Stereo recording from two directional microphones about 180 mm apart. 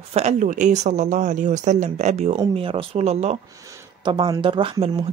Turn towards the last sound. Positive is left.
turn(degrees=-25)  # may be behind; listen again after turning